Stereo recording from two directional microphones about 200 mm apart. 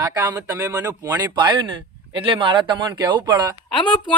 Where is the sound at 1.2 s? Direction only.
20° right (ahead or behind).